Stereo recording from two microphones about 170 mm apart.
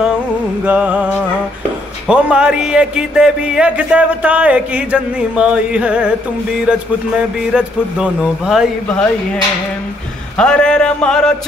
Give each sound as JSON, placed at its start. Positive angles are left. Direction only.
{"t": 0.7, "sound": "music", "side_deg": -10}
{"t": 2.0, "sound": "a man's voice", "side_deg": -5}
{"t": 7.5, "sound": "speech", "side_deg": -5}
{"t": 10.3, "sound": "speech", "side_deg": 5}